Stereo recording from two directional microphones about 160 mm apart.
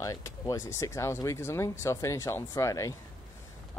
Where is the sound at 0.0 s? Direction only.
20° left (ahead or behind).